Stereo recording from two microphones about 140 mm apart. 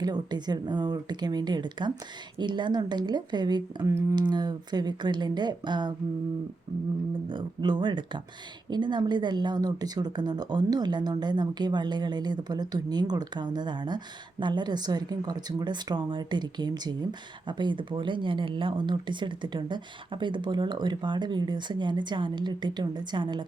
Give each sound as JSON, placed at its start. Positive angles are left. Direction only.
{"t": 0.0, "sound": "speech", "side_deg": -30}
{"t": 7.3, "sound": "speech", "side_deg": -35}